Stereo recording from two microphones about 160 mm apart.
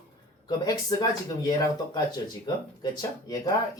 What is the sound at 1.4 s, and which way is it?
Speech, 25° left (ahead or behind).